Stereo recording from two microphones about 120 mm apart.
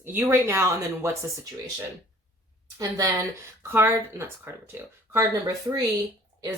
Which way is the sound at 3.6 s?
20° right (ahead or behind).